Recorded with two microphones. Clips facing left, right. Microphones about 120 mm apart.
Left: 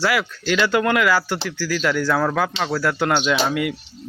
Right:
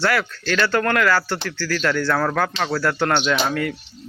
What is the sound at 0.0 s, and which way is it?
Speech, 10° left (ahead or behind).